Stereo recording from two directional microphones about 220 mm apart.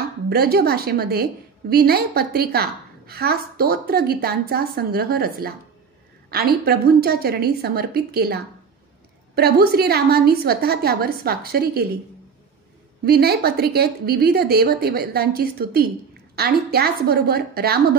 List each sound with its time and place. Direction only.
0.3 s a woman's voice: 45° right (ahead or behind)
13.0 s a woman's voice: 45° right (ahead or behind)